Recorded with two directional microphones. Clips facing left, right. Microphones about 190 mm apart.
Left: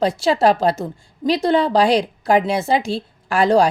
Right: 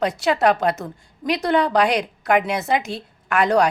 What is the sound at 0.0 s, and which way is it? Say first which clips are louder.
A woman's voice: left 3 dB; 30° left (ahead or behind).